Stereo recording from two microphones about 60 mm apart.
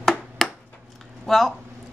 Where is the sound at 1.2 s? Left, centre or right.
Centre.